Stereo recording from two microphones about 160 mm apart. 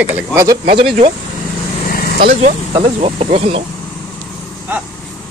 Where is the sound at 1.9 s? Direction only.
65° left (ahead or behind).